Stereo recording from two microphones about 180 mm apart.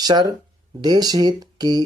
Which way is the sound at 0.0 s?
25° right (ahead or behind).